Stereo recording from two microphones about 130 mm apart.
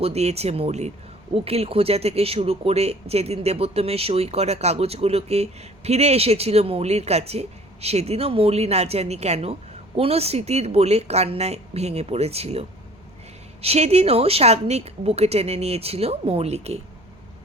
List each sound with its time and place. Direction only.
0.0 s speech: 55° right (ahead or behind)